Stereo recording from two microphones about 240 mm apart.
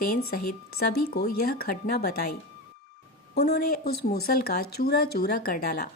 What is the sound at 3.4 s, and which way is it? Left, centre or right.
Speech, left.